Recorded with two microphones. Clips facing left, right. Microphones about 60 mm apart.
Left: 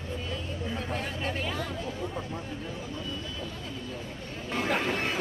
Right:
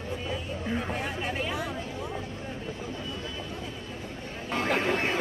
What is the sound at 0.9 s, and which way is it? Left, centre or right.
Speech, centre.